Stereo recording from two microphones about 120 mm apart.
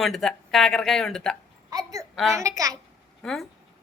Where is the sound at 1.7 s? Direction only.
30° right (ahead or behind).